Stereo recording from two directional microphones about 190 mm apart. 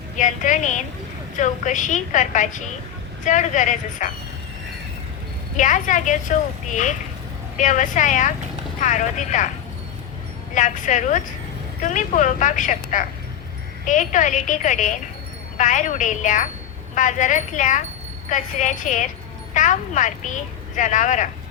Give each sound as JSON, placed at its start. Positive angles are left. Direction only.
{"t": 0.2, "sound": "a woman's voice", "side_deg": 40}
{"t": 5.5, "sound": "a woman's voice", "side_deg": 40}
{"t": 10.5, "sound": "a woman's voice", "side_deg": 40}